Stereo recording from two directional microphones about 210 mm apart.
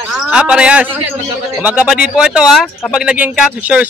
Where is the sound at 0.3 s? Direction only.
5° right (ahead or behind).